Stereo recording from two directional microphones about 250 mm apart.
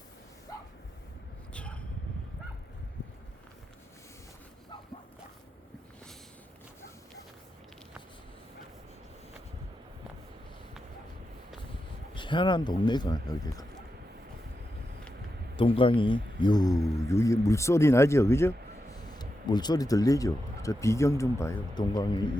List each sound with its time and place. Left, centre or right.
1.5 s vehicle: centre
12.1 s speech: centre
15.5 s speech: left